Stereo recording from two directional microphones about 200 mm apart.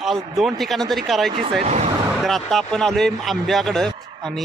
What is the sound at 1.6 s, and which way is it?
Speech, 35° right (ahead or behind).